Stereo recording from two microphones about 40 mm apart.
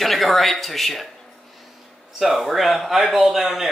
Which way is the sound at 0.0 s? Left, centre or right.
Centre.